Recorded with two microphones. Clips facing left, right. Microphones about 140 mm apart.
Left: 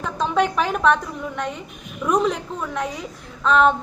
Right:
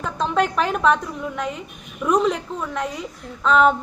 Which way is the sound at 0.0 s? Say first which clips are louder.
Even; centre (ahead or behind).